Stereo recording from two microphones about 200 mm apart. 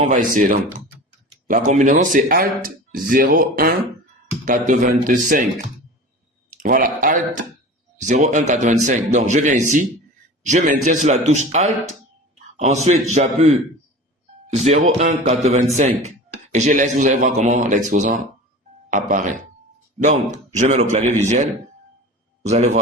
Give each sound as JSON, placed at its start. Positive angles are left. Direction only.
{"t": 0.1, "sound": "speech", "side_deg": -40}
{"t": 6.6, "sound": "speech", "side_deg": -45}
{"t": 14.5, "sound": "speech", "side_deg": -35}
{"t": 22.4, "sound": "speech", "side_deg": -35}